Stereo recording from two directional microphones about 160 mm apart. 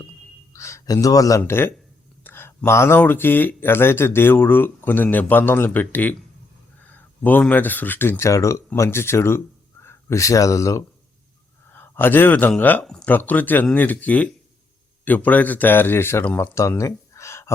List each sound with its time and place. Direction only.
0.5 s a man's voice: 20° left (ahead or behind)